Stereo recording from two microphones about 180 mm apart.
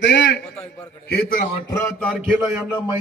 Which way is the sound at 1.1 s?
55° left (ahead or behind).